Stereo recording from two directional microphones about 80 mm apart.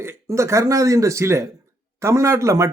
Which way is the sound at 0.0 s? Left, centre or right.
Right.